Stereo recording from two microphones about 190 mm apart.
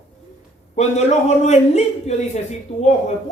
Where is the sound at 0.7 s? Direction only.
35° left (ahead or behind).